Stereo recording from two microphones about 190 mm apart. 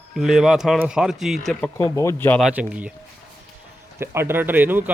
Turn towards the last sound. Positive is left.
turn(degrees=-10)  # may be behind; listen again after turning